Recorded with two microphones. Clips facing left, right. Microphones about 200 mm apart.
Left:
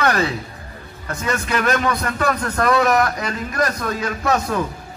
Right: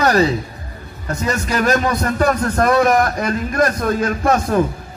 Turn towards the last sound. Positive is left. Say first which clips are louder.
# right 4 dB
turn(degrees=-50)  # may be behind; listen again after turning